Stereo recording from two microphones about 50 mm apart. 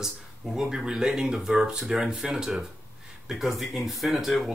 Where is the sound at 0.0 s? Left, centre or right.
Centre.